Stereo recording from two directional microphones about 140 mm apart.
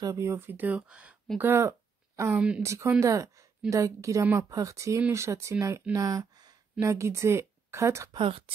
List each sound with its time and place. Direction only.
0.0 s speech: 20° right (ahead or behind)
1.4 s a woman's voice: 20° right (ahead or behind)
8.2 s speech: 40° right (ahead or behind)